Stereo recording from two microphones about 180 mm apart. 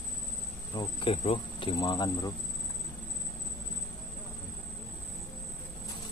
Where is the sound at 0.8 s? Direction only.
30° left (ahead or behind).